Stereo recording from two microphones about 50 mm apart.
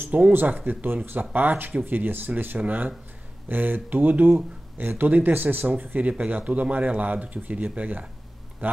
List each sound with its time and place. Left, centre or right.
0.1 s speech: right
0.7 s speech: right
6.0 s speech: right